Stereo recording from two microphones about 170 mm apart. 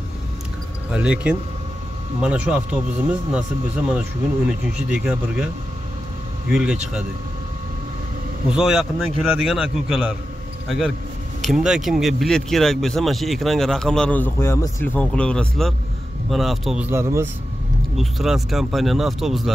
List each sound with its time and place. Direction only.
0.9 s speech: 5° right (ahead or behind)
4.5 s speech: 5° right (ahead or behind)
6.5 s speech: 5° right (ahead or behind)
8.5 s speech: 5° right (ahead or behind)
11.4 s speech: 5° right (ahead or behind)
16.9 s speech: 15° right (ahead or behind)
17.9 s speech: centre (ahead or behind)